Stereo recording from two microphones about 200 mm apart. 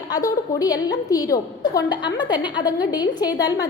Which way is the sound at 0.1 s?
20° left (ahead or behind).